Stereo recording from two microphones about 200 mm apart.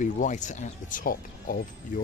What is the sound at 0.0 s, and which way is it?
Speech, 40° left (ahead or behind).